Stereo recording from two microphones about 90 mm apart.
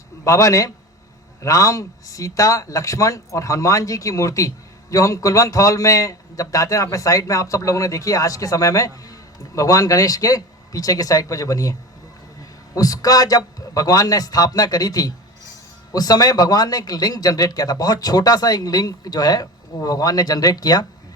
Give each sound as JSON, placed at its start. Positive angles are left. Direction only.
{"t": 0.3, "sound": "a man's voice", "side_deg": 40}